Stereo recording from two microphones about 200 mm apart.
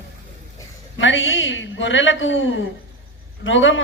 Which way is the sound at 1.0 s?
70° left (ahead or behind).